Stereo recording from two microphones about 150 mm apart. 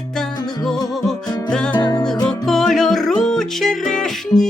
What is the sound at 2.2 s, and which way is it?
Music, centre (ahead or behind).